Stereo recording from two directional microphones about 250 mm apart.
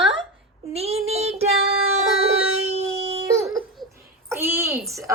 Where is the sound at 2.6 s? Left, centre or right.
Right.